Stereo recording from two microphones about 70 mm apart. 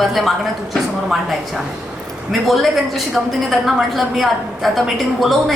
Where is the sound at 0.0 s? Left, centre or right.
Centre.